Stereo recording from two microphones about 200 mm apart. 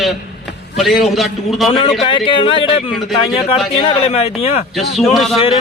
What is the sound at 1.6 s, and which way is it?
Speech, 25° left (ahead or behind).